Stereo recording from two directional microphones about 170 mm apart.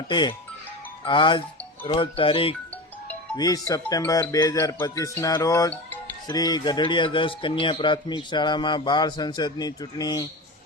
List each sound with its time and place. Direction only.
0.1 s speech: 25° left (ahead or behind)